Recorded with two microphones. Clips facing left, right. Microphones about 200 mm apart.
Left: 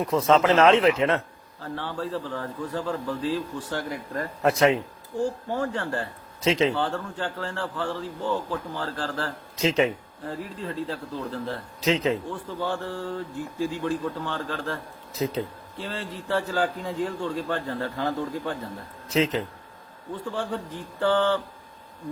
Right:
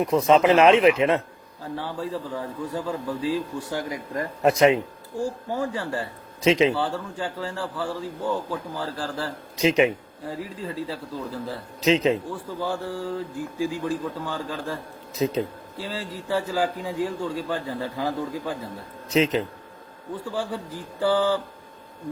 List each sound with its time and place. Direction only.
0.0 s a man's voice: 15° right (ahead or behind)
11.9 s a man's voice: 20° right (ahead or behind)
12.3 s a man's voice: 10° right (ahead or behind)
15.8 s a man's voice: 10° right (ahead or behind)
19.0 s speech: 20° right (ahead or behind)
20.2 s a man's voice: 10° right (ahead or behind)